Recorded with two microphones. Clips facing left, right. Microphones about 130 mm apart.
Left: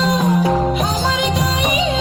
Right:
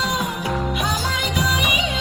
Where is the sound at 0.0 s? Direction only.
35° left (ahead or behind).